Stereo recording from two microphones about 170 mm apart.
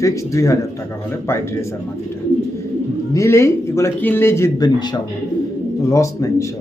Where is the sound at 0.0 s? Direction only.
15° left (ahead or behind).